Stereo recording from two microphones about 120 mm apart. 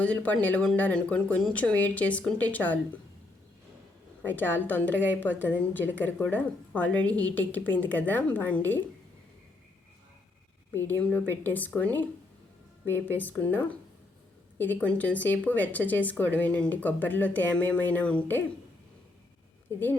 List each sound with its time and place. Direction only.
0.0 s a woman's voice: 10° left (ahead or behind)
4.2 s a woman's voice: 15° left (ahead or behind)
10.7 s a woman's voice: 15° left (ahead or behind)
12.9 s a woman's voice: 15° left (ahead or behind)